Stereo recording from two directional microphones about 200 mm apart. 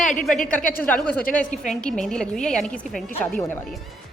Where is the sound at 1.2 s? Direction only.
40° left (ahead or behind).